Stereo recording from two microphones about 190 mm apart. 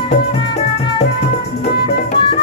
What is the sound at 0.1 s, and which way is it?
Music, 35° left (ahead or behind).